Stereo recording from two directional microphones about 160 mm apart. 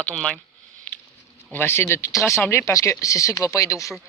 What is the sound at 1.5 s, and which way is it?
Speech, 15° left (ahead or behind).